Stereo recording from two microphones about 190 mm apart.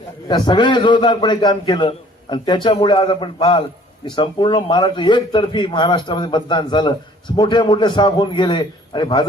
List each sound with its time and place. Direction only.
0.3 s a man's voice: 25° left (ahead or behind)